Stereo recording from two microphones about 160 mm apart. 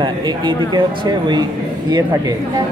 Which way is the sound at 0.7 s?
30° right (ahead or behind).